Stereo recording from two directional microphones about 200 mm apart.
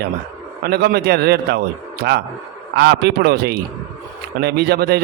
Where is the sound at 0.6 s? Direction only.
50° right (ahead or behind).